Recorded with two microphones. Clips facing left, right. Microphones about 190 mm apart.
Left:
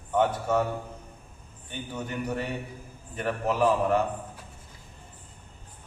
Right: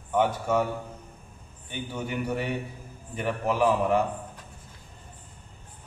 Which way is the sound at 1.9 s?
10° right (ahead or behind).